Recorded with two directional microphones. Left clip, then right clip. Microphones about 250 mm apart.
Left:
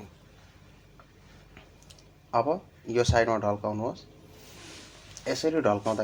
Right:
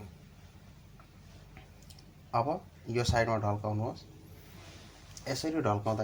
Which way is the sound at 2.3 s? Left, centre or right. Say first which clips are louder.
Left 5 dB; centre.